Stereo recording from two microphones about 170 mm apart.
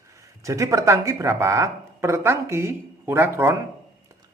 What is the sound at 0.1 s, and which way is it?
Speech, 20° right (ahead or behind).